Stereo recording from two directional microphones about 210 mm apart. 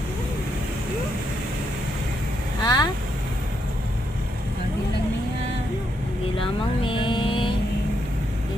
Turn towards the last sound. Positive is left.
turn(degrees=25)  # may be behind; listen again after turning